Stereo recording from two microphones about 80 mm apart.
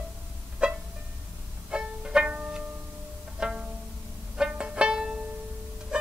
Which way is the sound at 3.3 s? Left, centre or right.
Centre.